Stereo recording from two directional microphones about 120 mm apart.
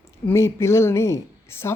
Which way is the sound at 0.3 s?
20° left (ahead or behind).